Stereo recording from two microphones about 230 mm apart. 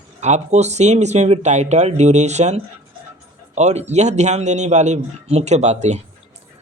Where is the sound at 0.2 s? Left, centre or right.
Right.